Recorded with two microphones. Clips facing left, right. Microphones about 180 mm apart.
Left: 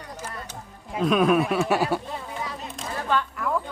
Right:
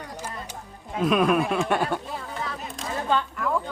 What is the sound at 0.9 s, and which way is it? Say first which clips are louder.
Speech: left 1 dB; centre (ahead or behind).